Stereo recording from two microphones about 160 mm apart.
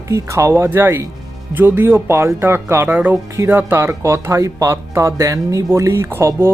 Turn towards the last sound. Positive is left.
turn(degrees=-15)  # may be behind; listen again after turning